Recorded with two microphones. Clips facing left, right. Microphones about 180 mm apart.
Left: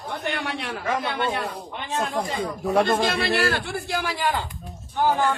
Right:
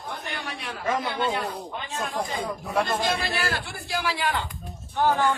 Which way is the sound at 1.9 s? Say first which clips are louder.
Left 4 dB; 65° left (ahead or behind).